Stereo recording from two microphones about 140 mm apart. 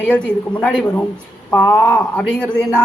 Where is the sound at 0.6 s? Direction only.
5° left (ahead or behind).